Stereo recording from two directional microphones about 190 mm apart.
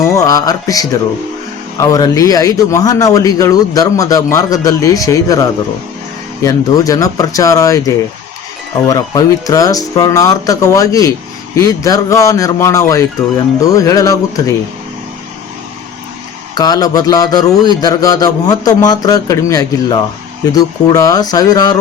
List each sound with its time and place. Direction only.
0.2 s a man's voice: 20° left (ahead or behind)
16.6 s a man's voice: 20° left (ahead or behind)